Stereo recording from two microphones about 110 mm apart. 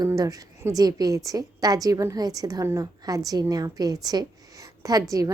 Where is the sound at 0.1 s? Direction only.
30° right (ahead or behind).